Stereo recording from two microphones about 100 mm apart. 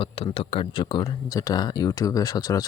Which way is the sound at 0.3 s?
65° left (ahead or behind).